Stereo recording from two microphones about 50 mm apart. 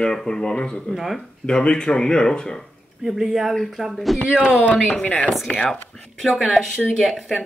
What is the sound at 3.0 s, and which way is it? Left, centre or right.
Speech, centre.